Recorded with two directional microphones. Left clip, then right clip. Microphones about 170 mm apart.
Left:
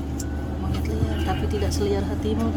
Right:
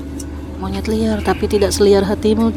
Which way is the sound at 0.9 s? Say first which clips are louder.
Right 12 dB; 45° right (ahead or behind).